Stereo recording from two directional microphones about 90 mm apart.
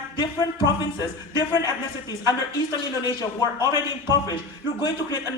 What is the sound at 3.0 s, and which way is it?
Speech, 45° left (ahead or behind).